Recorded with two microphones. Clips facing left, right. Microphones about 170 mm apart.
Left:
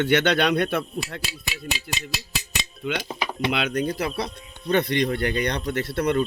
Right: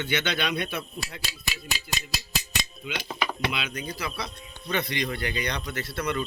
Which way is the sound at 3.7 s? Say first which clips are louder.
Left 9 dB; 65° left (ahead or behind).